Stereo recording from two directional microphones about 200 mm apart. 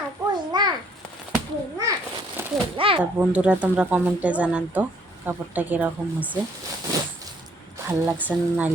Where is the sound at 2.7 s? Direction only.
25° right (ahead or behind).